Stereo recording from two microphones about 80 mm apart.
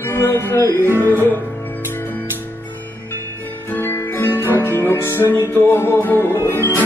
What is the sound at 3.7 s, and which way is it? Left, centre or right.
Music, left.